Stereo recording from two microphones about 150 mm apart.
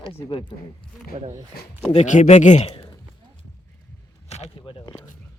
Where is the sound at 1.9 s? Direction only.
55° left (ahead or behind); by 2.9 s 40° left (ahead or behind).